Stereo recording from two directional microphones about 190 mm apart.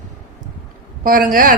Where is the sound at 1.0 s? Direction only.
45° right (ahead or behind).